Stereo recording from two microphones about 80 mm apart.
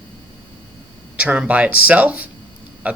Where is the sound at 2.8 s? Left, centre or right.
Centre.